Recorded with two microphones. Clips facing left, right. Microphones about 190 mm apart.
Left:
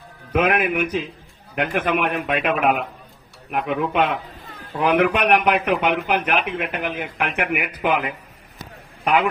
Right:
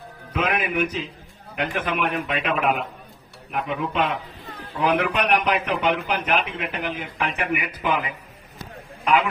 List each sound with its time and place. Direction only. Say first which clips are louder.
0.3 s speech: left 4 dB; 55° left (ahead or behind)